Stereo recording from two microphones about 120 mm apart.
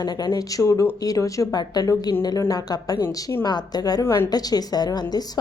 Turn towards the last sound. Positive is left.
turn(degrees=35)  # may be behind; listen again after turning